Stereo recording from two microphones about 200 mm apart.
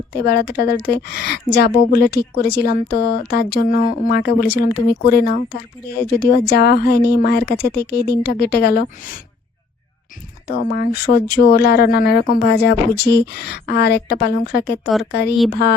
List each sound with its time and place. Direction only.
0.1 s a woman's voice: 50° left (ahead or behind)
10.4 s a woman's voice: 50° left (ahead or behind)